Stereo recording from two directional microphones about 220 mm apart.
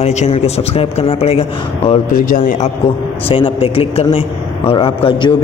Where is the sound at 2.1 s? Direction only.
35° left (ahead or behind).